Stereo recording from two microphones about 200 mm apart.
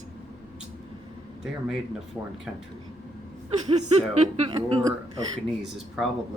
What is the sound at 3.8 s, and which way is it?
A woman's voice, 30° right (ahead or behind).